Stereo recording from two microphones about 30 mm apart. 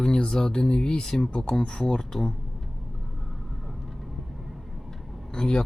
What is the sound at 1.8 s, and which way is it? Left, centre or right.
Speech, left.